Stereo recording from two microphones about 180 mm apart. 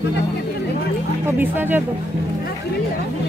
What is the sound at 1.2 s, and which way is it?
Speech, 10° right (ahead or behind).